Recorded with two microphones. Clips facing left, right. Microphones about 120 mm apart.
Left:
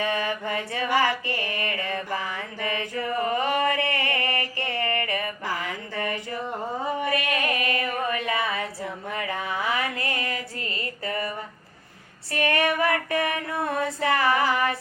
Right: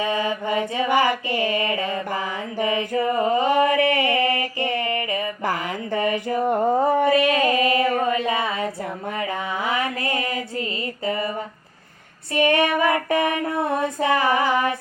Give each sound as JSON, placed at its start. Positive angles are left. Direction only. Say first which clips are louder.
{"t": 0.0, "sound": "mantra", "louder": "right 3 dB", "side_deg": -20}
{"t": 5.9, "sound": "a sound", "louder": "right 9 dB", "side_deg": -15}
{"t": 6.2, "sound": "a sound", "louder": "right 11 dB", "side_deg": -55}
{"t": 7.1, "sound": "female singing", "louder": "right 8 dB", "side_deg": -25}
{"t": 12.3, "sound": "female singing", "louder": "right 6 dB", "side_deg": -20}
{"t": 13.8, "sound": "female singing", "louder": "right 1 dB", "side_deg": -20}